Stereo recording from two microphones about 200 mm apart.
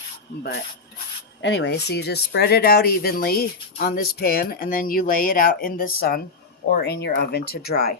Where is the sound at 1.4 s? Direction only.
60° left (ahead or behind).